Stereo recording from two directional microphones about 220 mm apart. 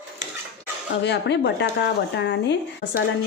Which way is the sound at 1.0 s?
50° left (ahead or behind).